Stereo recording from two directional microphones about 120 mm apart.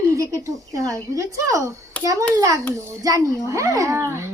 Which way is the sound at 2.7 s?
25° right (ahead or behind).